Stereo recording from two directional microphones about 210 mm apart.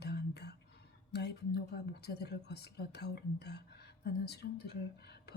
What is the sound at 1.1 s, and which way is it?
A woman's voice, 50° left (ahead or behind).